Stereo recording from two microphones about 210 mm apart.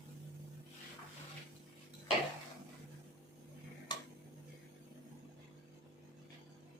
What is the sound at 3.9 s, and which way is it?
Tick-tock, 20° left (ahead or behind).